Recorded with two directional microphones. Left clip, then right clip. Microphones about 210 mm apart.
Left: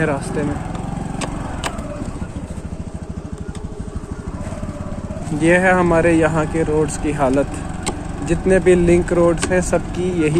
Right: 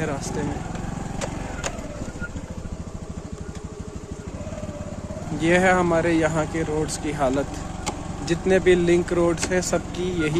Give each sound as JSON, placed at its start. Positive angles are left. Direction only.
{"t": 5.4, "sound": "speech", "side_deg": -5}